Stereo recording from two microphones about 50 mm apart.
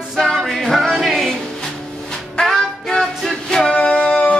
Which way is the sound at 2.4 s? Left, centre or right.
Centre.